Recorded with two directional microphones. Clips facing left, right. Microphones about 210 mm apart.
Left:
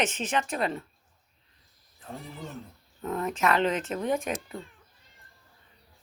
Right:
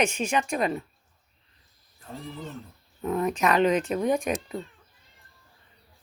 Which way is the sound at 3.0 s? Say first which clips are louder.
Right 3 dB; 15° right (ahead or behind).